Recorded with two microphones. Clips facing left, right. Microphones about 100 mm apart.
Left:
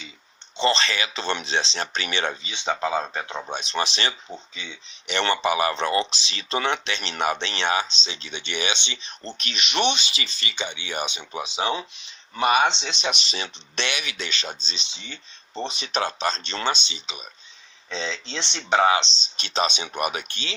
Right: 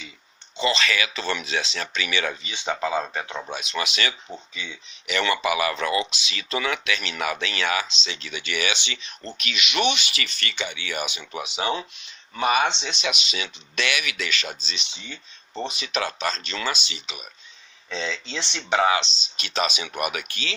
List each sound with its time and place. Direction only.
0.5 s speech: 30° left (ahead or behind); by 3.5 s 15° left (ahead or behind)
3.5 s speech: 35° left (ahead or behind)
4.5 s speech: 20° left (ahead or behind)
5.0 s speech: 30° left (ahead or behind)
12.3 s speech: 5° left (ahead or behind)
12.6 s speech: 10° right (ahead or behind)
13.0 s speech: 35° left (ahead or behind)
15.0 s speech: 10° right (ahead or behind)
15.6 s speech: 35° left (ahead or behind)
18.3 s speech: 5° right (ahead or behind)
18.7 s speech: 20° left (ahead or behind)